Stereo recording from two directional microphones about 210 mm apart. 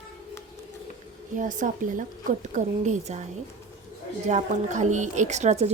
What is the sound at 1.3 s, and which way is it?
A woman's voice, 35° right (ahead or behind).